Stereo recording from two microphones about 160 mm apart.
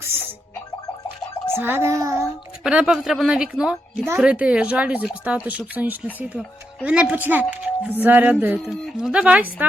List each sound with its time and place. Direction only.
1.5 s speech: 15° right (ahead or behind)
2.6 s speech: 5° right (ahead or behind)